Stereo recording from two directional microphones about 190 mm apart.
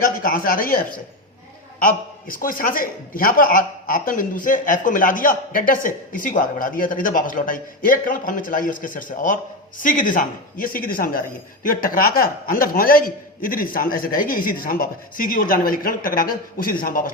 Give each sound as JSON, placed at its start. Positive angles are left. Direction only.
{"t": 0.0, "sound": "a man's voice", "side_deg": 50}